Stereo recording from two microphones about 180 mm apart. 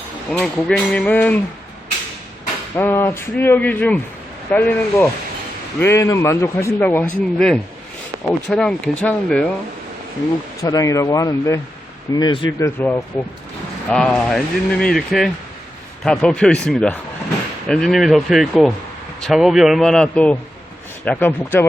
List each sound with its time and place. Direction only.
0.3 s a man's voice: 5° left (ahead or behind)
2.7 s a man's voice: 10° left (ahead or behind)
10.6 s a man's voice: 20° left (ahead or behind)